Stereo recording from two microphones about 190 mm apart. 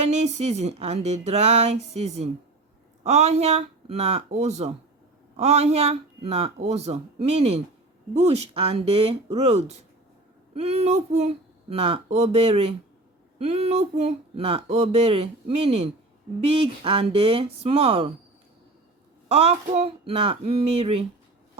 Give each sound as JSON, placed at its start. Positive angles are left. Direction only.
{"t": 0.0, "sound": "speech", "side_deg": -35}
{"t": 19.3, "sound": "speech", "side_deg": -30}